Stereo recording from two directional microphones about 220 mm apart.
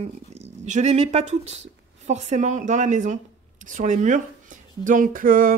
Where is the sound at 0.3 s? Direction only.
30° right (ahead or behind).